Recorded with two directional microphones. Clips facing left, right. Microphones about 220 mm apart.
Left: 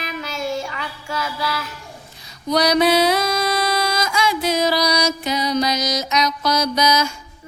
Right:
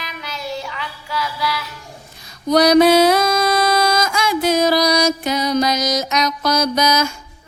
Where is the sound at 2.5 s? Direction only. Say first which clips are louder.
Right 5 dB; 50° right (ahead or behind).